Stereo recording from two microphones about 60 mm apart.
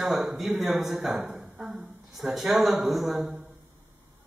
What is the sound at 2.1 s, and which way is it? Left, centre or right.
Mantra, centre.